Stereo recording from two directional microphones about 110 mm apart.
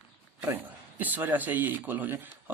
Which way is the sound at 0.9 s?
15° right (ahead or behind).